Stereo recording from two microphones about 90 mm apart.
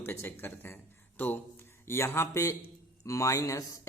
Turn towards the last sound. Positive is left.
turn(degrees=40)  # may be behind; listen again after turning